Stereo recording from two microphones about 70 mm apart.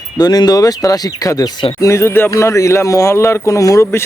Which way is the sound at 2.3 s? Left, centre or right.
Left.